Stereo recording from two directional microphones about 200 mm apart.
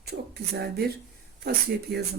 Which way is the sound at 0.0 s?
55° right (ahead or behind).